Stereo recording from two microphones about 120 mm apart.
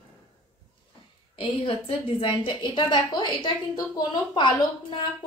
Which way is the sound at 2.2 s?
45° left (ahead or behind).